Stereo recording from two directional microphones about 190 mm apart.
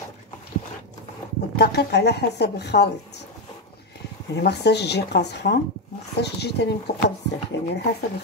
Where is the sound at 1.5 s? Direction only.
60° left (ahead or behind).